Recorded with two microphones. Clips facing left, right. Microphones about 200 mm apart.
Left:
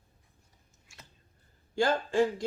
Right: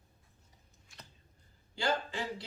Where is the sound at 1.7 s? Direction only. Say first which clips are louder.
Left 8 dB; 50° left (ahead or behind).